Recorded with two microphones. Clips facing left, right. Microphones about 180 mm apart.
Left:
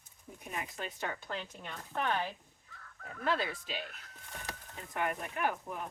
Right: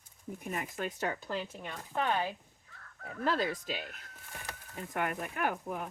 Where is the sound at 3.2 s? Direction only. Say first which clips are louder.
Right 2 dB; 40° right (ahead or behind).